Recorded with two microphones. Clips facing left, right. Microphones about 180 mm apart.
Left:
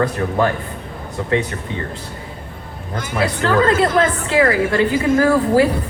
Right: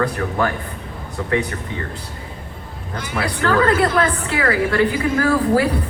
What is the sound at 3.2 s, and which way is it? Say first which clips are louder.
Speech: left 2 dB; 20° left (ahead or behind).